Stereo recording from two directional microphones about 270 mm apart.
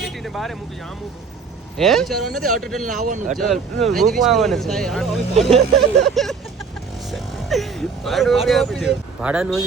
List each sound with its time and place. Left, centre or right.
0.0 s vehicle: centre
1.8 s speech: centre
2.8 s a man's voice: right
3.3 s speech: centre
7.1 s vehicle: centre
8.4 s speech: centre